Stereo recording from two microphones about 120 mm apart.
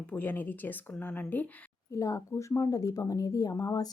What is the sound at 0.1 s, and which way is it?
Speech, 15° left (ahead or behind).